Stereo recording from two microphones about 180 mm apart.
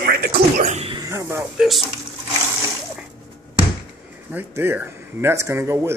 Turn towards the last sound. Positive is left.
turn(degrees=-15)  # may be behind; listen again after turning